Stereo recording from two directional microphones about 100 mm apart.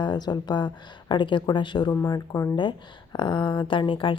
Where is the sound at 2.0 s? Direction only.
35° left (ahead or behind).